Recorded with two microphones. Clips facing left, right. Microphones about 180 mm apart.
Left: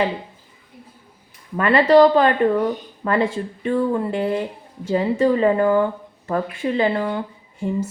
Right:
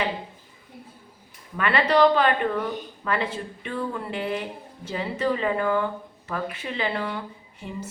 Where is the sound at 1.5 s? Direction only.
40° left (ahead or behind).